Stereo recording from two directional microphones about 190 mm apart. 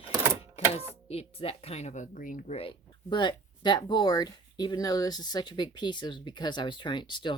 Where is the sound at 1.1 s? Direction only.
30° left (ahead or behind); by 2.5 s 45° left (ahead or behind).